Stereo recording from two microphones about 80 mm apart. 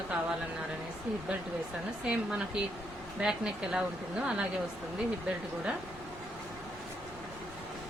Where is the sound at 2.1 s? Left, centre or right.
Centre.